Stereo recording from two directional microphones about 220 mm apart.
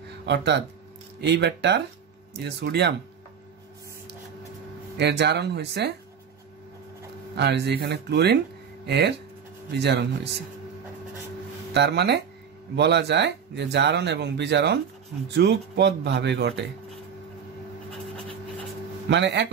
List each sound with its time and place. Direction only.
0.2 s speech: 50° right (ahead or behind)
4.9 s speech: 50° right (ahead or behind)
7.3 s speech: 50° right (ahead or behind)
11.7 s speech: 50° right (ahead or behind)
19.0 s speech: 50° right (ahead or behind)